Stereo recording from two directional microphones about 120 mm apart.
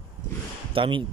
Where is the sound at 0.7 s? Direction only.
45° right (ahead or behind).